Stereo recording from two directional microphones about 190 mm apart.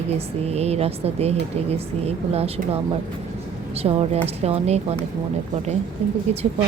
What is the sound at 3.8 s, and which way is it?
Speech, 30° right (ahead or behind).